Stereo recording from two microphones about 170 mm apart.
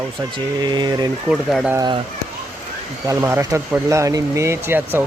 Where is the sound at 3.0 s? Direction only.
15° right (ahead or behind).